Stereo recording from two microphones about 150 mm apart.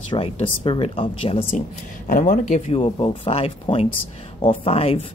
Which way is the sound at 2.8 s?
35° left (ahead or behind).